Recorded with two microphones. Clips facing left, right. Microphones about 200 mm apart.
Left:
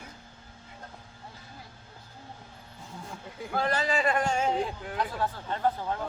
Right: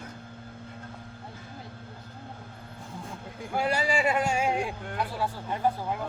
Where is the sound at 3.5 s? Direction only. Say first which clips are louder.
Right 1 dB; 10° right (ahead or behind).